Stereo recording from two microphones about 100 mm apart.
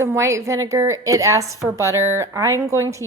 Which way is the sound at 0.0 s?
30° right (ahead or behind).